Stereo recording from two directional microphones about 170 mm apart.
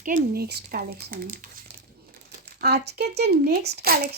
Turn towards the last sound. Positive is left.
turn(degrees=-70)  # may be behind; listen again after turning